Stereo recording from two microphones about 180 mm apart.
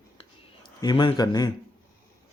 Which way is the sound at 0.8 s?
25° left (ahead or behind).